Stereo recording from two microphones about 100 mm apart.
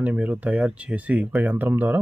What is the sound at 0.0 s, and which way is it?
Speech, 15° right (ahead or behind).